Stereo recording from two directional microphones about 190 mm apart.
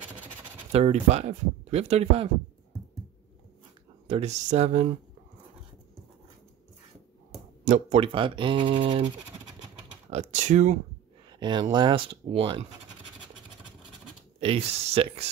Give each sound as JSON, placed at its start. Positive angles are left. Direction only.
{"t": 0.7, "sound": "speech", "side_deg": -35}
{"t": 4.1, "sound": "speech", "side_deg": -35}
{"t": 7.6, "sound": "speech", "side_deg": -35}
{"t": 10.1, "sound": "speech", "side_deg": -35}
{"t": 11.3, "sound": "speech", "side_deg": -25}
{"t": 14.4, "sound": "speech", "side_deg": -30}